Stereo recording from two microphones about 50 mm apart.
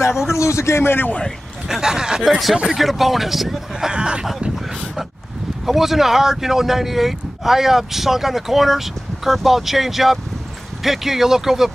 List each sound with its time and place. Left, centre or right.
0.1 s a man's voice: centre
0.4 s a man's voice: left
1.7 s speech: centre
2.7 s speech: centre
3.9 s speech: centre
5.7 s speech: centre